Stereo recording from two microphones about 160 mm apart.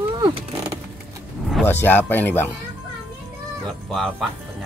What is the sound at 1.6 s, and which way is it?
Speech, 10° left (ahead or behind).